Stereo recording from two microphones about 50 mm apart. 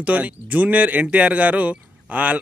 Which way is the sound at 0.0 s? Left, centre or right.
Right.